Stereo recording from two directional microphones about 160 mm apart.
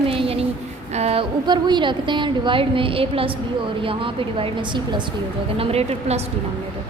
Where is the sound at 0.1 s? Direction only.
35° right (ahead or behind).